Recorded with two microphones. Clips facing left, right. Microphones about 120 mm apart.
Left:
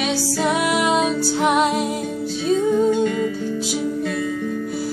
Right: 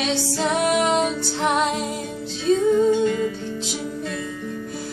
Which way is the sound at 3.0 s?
50° left (ahead or behind).